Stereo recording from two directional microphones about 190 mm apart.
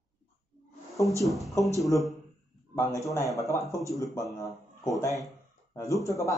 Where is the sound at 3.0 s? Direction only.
15° left (ahead or behind).